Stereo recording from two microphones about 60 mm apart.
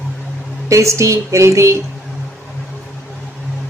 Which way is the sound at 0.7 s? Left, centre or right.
Right.